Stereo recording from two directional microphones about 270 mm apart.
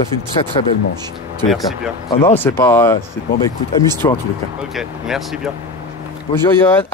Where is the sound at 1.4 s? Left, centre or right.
Centre.